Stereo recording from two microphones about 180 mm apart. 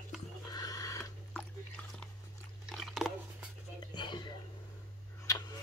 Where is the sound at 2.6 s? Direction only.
Centre (ahead or behind).